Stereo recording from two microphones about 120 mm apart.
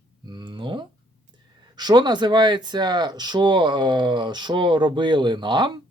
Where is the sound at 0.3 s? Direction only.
40° right (ahead or behind).